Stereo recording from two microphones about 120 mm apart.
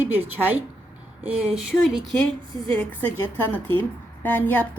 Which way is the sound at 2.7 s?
15° left (ahead or behind).